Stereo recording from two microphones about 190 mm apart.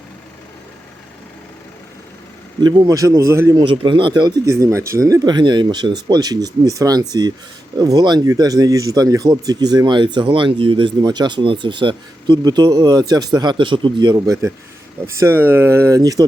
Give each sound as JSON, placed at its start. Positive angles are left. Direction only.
{"t": 2.6, "sound": "speech", "side_deg": -25}